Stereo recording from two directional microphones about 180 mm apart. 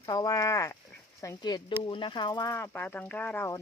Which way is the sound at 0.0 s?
20° left (ahead or behind).